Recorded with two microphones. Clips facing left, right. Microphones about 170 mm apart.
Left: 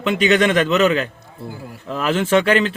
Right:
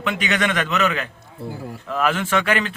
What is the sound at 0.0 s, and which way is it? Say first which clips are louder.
Speech: left 7 dB; 30° left (ahead or behind).